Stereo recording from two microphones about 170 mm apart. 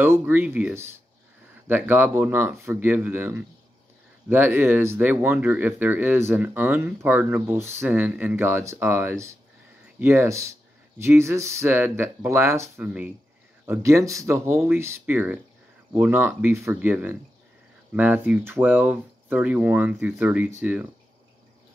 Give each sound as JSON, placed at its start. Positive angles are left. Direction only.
{"t": 0.0, "sound": "speech", "side_deg": -10}